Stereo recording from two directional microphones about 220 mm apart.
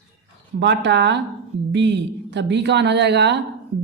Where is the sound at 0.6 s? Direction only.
55° right (ahead or behind).